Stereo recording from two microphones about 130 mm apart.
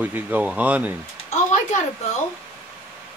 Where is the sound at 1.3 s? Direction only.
65° left (ahead or behind).